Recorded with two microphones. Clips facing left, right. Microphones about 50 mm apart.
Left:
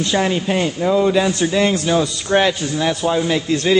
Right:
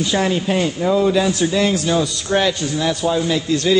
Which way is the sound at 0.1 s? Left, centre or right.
Centre.